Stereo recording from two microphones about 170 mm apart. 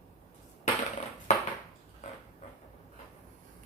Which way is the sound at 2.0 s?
45° left (ahead or behind).